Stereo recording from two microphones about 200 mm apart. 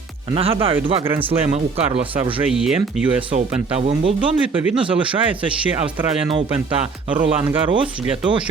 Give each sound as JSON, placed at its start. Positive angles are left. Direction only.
{"t": 0.3, "sound": "speech", "side_deg": -25}
{"t": 2.5, "sound": "speech", "side_deg": 0}
{"t": 3.3, "sound": "speech", "side_deg": -30}